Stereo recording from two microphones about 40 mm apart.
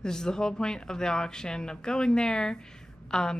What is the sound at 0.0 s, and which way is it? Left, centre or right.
A woman's voice, centre.